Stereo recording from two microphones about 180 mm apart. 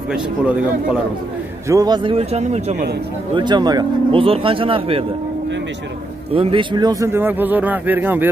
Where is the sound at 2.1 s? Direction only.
40° right (ahead or behind).